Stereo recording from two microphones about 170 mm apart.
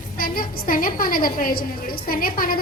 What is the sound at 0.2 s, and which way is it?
A woman's voice, 60° left (ahead or behind).